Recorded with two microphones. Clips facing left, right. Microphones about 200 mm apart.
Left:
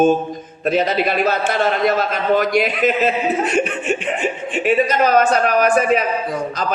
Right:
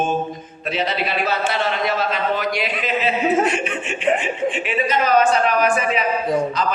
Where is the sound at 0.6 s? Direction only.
45° left (ahead or behind).